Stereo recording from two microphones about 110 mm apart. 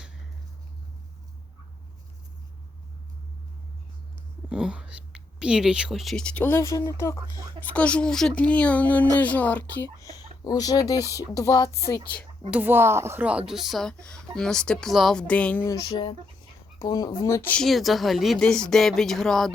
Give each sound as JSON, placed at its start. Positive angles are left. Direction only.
{"t": 4.4, "sound": "speech", "side_deg": -5}
{"t": 7.6, "sound": "speech", "side_deg": 10}
{"t": 10.0, "sound": "speech", "side_deg": 35}
{"t": 11.3, "sound": "a sound", "side_deg": 30}
{"t": 12.5, "sound": "speech", "side_deg": -15}
{"t": 13.2, "sound": "speech", "side_deg": -10}
{"t": 15.3, "sound": "speech", "side_deg": 10}
{"t": 15.6, "sound": "a sound", "side_deg": 30}
{"t": 16.8, "sound": "speech", "side_deg": 35}
{"t": 17.5, "sound": "speech", "side_deg": 5}